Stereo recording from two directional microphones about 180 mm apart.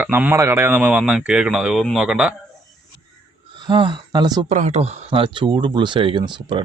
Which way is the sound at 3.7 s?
25° right (ahead or behind).